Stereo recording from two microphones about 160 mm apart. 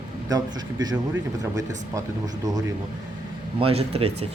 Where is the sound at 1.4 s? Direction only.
20° right (ahead or behind).